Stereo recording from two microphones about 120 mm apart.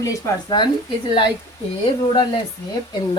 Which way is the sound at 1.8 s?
45° left (ahead or behind).